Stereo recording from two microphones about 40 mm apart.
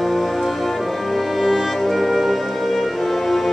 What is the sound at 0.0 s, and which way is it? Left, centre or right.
Music, centre.